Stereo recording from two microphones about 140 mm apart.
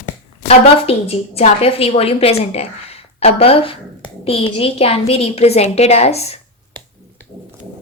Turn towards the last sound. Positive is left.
turn(degrees=50)  # may be behind; listen again after turning